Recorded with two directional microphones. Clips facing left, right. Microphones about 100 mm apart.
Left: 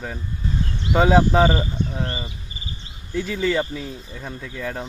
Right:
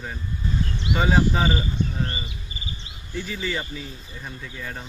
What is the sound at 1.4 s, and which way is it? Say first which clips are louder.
Speech: left 4 dB; 45° left (ahead or behind).